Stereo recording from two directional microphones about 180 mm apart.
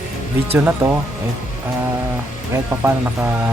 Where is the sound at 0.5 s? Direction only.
10° right (ahead or behind).